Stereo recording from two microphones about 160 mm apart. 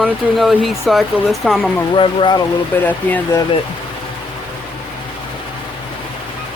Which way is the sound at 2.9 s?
10° left (ahead or behind).